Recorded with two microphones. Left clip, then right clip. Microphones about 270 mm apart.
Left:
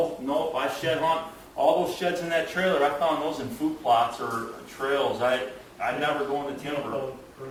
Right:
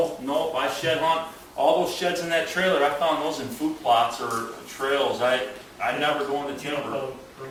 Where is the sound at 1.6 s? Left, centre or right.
Left.